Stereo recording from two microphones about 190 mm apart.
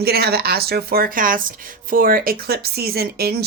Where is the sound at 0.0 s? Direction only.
55° right (ahead or behind).